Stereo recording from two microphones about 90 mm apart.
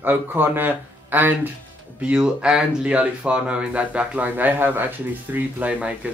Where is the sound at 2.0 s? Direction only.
10° right (ahead or behind).